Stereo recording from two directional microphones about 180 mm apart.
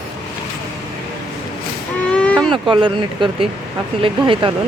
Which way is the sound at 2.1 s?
5° left (ahead or behind).